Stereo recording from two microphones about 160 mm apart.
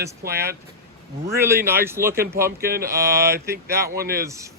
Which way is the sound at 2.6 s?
70° right (ahead or behind).